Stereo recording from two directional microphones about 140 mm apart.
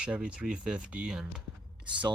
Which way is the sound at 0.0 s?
5° right (ahead or behind).